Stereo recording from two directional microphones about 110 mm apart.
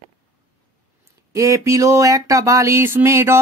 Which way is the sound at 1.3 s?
30° right (ahead or behind).